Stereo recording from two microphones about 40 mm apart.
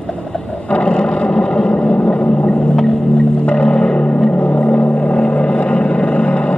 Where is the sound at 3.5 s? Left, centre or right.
Left.